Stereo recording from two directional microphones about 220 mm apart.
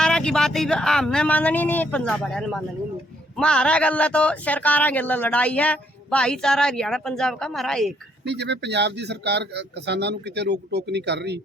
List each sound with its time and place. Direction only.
0.0 s speech: 5° left (ahead or behind)
8.2 s a man's voice: 50° right (ahead or behind)